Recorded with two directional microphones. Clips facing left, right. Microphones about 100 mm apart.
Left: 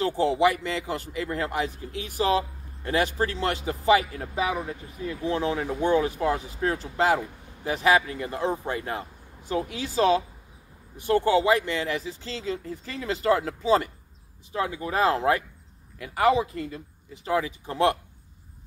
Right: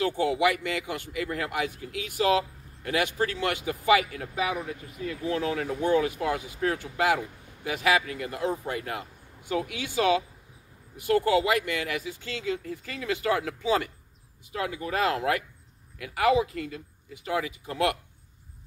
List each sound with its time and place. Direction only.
0.0 s speech: 30° left (ahead or behind)
7.6 s speech: 35° left (ahead or behind)